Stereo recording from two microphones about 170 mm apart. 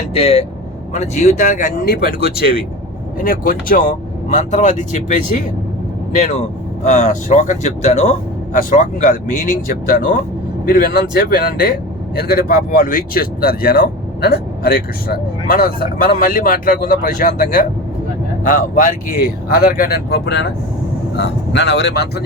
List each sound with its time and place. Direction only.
0.1 s speech: 35° left (ahead or behind)
6.8 s speech: 45° left (ahead or behind)
8.5 s speech: 50° left (ahead or behind); by 22.2 s 75° left (ahead or behind)